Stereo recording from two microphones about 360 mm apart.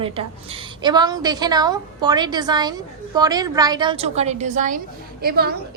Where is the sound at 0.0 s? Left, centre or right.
Centre.